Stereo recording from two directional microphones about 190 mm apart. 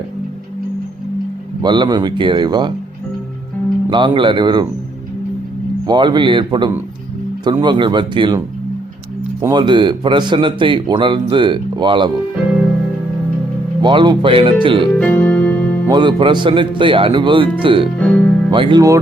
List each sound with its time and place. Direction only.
1.6 s a man's voice: 25° right (ahead or behind)
3.8 s a man's voice: 25° right (ahead or behind)
5.8 s a man's voice: 25° right (ahead or behind)
9.4 s a man's voice: 25° right (ahead or behind)
13.8 s a man's voice: 25° right (ahead or behind)
14.9 s music: 5° left (ahead or behind)
15.9 s a man's voice: 25° right (ahead or behind)
17.9 s speech: 5° left (ahead or behind)
18.5 s a man's voice: 25° right (ahead or behind)